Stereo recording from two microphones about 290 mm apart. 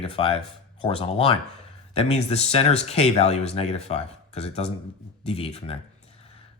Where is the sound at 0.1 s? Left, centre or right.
Centre.